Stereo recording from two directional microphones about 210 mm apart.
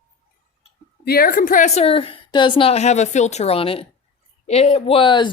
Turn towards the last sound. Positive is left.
turn(degrees=20)  # may be behind; listen again after turning